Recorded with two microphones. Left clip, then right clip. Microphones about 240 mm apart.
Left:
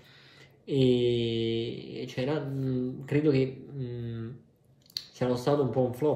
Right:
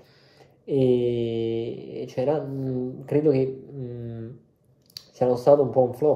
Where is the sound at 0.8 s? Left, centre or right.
Centre.